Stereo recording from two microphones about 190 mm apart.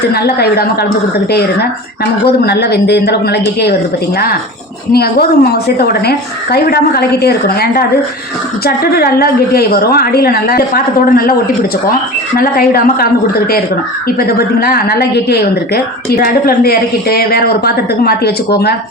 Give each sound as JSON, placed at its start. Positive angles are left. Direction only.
{"t": 0.1, "sound": "a woman's voice", "side_deg": 55}
{"t": 2.4, "sound": "a woman's voice", "side_deg": 60}
{"t": 4.9, "sound": "a woman's voice", "side_deg": 55}
{"t": 12.4, "sound": "a woman's voice", "side_deg": 50}
{"t": 14.2, "sound": "a woman's voice", "side_deg": 55}